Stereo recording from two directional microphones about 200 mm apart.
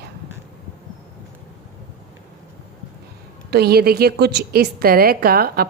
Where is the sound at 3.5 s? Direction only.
50° right (ahead or behind).